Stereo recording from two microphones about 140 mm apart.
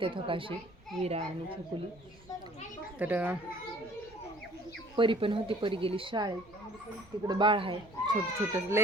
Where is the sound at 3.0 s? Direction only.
10° right (ahead or behind).